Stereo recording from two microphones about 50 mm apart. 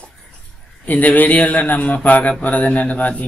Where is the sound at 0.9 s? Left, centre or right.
Left.